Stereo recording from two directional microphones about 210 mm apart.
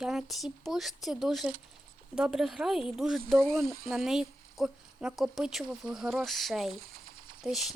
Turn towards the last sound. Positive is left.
turn(degrees=0)  # may be behind; listen again after turning